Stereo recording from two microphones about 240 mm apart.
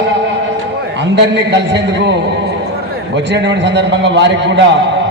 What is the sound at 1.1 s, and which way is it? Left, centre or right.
A man's voice, right.